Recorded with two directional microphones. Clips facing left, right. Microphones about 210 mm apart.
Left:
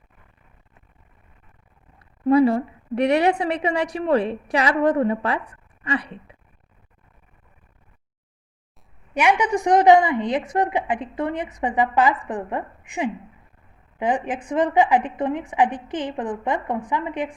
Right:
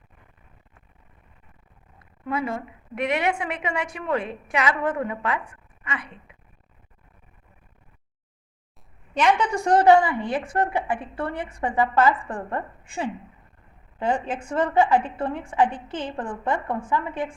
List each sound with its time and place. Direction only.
2.2 s a woman's voice: 35° left (ahead or behind)
9.1 s a woman's voice: 10° left (ahead or behind)